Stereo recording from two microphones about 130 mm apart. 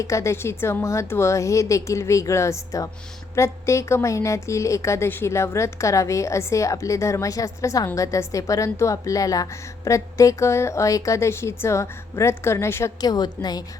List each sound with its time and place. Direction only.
0.0 s a woman's voice: 25° left (ahead or behind)